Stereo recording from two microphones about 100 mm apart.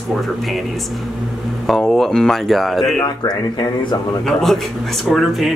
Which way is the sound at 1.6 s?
Centre (ahead or behind).